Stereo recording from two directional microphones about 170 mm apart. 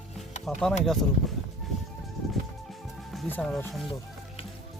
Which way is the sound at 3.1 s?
5° left (ahead or behind).